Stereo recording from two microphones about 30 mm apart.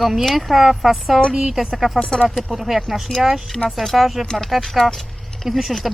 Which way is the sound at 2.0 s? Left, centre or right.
Left.